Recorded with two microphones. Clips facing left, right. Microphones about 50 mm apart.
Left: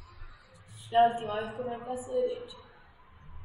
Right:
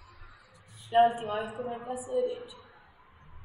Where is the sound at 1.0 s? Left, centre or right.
Centre.